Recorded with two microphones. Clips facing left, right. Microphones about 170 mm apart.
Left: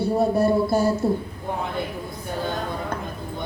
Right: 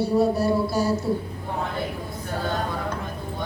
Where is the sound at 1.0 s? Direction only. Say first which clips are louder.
Left 3 dB; 50° left (ahead or behind).